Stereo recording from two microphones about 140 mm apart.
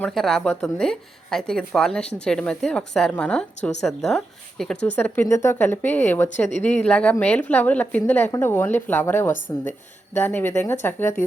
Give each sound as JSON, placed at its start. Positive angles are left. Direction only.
{"t": 0.1, "sound": "a woman's voice", "side_deg": 0}